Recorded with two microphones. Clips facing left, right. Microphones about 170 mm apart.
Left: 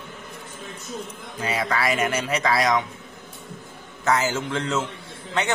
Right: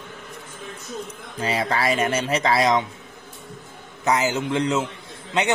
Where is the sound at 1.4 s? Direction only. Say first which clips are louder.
Right 2 dB; 30° right (ahead or behind).